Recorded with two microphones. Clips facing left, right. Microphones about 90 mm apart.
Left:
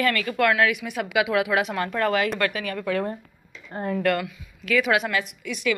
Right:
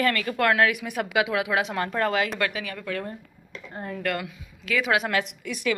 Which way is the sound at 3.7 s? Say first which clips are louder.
Left 7 dB; 55° left (ahead or behind).